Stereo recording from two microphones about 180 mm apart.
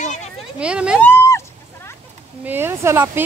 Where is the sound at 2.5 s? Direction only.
10° right (ahead or behind).